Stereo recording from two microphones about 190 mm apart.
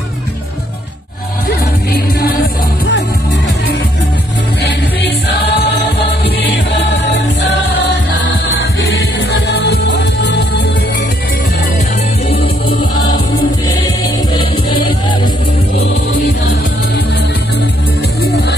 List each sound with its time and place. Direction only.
1.5 s music: 55° left (ahead or behind)
6.4 s music: 65° left (ahead or behind)
9.5 s music: 60° left (ahead or behind)
14.7 s music: 25° left (ahead or behind)